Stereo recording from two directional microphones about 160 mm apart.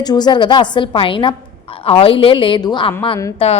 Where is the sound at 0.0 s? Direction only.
25° left (ahead or behind).